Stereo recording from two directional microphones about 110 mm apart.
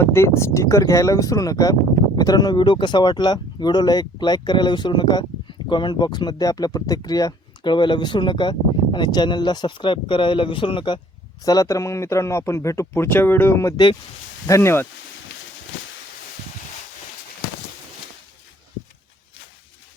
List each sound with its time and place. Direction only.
0.0 s a man's voice: 25° left (ahead or behind); by 11.0 s 45° left (ahead or behind)
11.4 s a man's voice: 30° left (ahead or behind)